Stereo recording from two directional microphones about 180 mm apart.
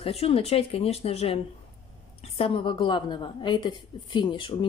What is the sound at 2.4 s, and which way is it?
Speech, 30° left (ahead or behind).